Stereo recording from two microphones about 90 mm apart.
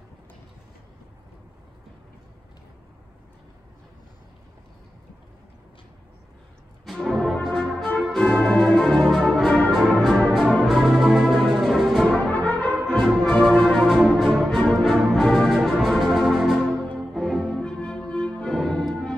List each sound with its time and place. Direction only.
6.9 s brass instrument: centre (ahead or behind)
8.2 s music: 10° left (ahead or behind)
9.3 s brass instrument: centre (ahead or behind)
9.7 s music: 5° right (ahead or behind)
10.2 s brass instrument: 5° left (ahead or behind)
11.6 s music: 5° right (ahead or behind)
12.3 s brass instrument: 15° left (ahead or behind)
12.8 s brass instrument: centre (ahead or behind)
17.1 s music: centre (ahead or behind)